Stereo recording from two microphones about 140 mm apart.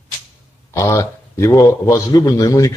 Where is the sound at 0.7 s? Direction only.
20° left (ahead or behind).